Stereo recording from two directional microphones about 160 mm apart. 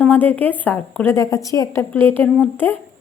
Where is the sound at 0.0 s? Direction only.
10° left (ahead or behind).